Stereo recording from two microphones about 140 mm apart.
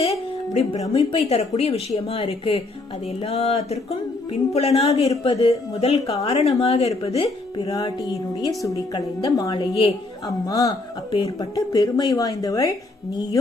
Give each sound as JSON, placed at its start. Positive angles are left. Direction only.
{"t": 0.0, "sound": "speech", "side_deg": 45}
{"t": 8.4, "sound": "a woman's voice", "side_deg": 25}